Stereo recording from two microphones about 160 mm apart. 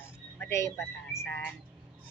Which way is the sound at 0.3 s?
15° left (ahead or behind).